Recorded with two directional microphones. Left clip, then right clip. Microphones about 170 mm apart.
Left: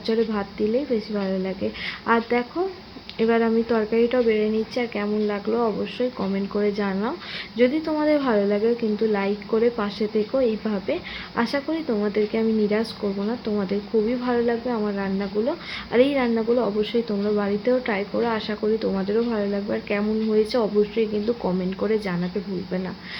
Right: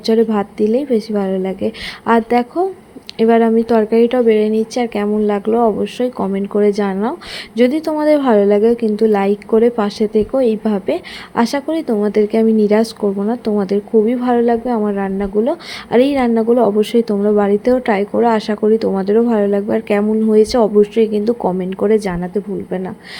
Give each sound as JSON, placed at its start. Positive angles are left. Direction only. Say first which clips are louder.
{"t": 0.0, "sound": "speech", "louder": "right 9 dB", "side_deg": -45}
{"t": 18.6, "sound": "speech", "louder": "right 8 dB", "side_deg": -45}